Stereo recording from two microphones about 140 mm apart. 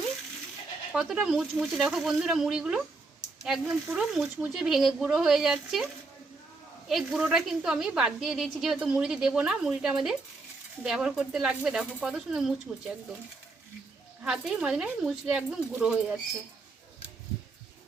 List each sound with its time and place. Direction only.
0.9 s a woman's voice: 5° right (ahead or behind)
14.3 s a woman's voice: 5° right (ahead or behind)